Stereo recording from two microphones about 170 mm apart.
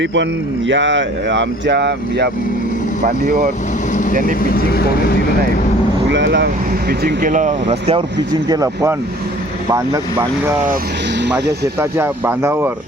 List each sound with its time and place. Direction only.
0.0 s speech: 90° right
4.4 s speech: 65° left (ahead or behind)
6.1 s speech: 90° right; by 10.5 s 15° right (ahead or behind)
11.2 s speech: 80° right
11.8 s speech: 15° right (ahead or behind)